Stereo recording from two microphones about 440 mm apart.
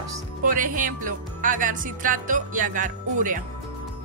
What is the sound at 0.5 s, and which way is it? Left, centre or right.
Music, centre.